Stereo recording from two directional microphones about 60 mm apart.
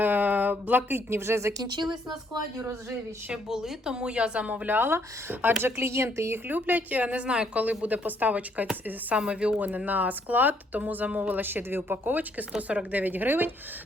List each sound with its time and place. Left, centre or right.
0.0 s speech: right
3.5 s speech: centre; by 5.7 s right
5.7 s a woman's voice: right
6.5 s speech: right
9.6 s speech: right